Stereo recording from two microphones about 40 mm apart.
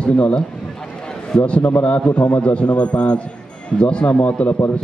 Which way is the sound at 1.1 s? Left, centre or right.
Left.